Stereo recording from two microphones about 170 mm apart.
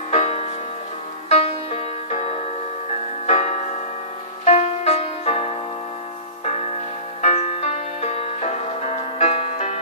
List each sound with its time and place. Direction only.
0.1 s music: 40° left (ahead or behind)